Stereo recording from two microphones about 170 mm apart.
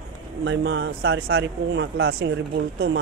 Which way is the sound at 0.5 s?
90° right.